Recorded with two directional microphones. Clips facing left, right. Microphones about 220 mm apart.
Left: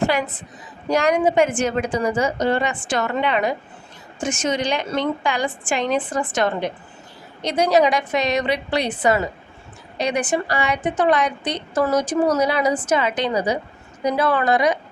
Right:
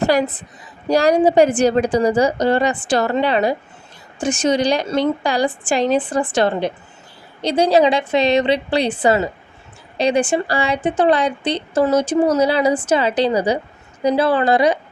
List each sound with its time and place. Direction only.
0.0 s a woman's voice: 40° right (ahead or behind)